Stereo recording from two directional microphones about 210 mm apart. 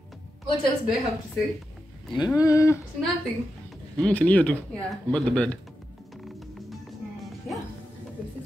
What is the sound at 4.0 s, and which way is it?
A man's voice, 5° left (ahead or behind).